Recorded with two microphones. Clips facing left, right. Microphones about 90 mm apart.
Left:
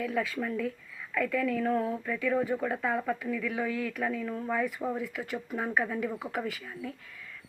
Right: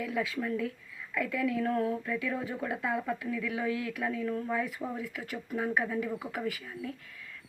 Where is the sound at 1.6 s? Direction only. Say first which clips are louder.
Left 1 dB; 10° left (ahead or behind).